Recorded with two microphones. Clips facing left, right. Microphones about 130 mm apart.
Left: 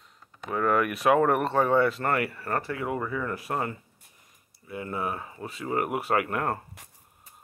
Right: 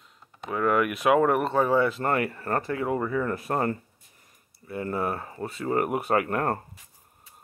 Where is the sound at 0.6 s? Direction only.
20° right (ahead or behind); by 3.3 s 35° right (ahead or behind).